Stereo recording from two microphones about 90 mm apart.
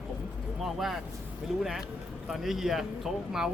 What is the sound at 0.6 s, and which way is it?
Speech, 5° right (ahead or behind).